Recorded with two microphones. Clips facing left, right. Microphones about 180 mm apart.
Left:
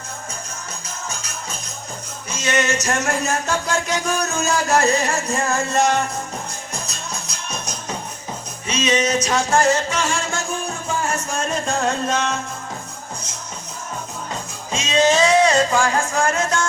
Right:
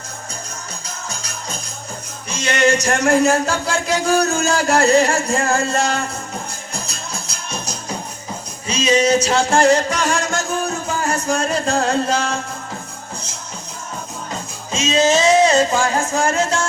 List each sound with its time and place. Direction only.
1.1 s music: 35° right (ahead or behind)
14.7 s music: 25° right (ahead or behind)